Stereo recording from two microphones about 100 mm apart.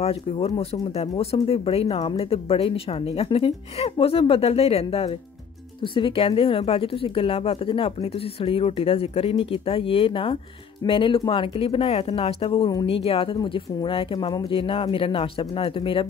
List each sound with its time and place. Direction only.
0.0 s speech: 80° left
5.9 s speech: 65° left (ahead or behind)